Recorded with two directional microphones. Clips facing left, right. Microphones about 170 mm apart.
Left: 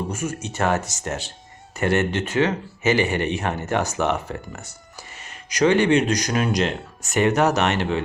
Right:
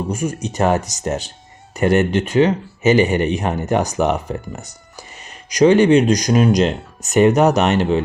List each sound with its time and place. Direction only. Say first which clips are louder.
0.1 s speech: right 5 dB; 15° right (ahead or behind)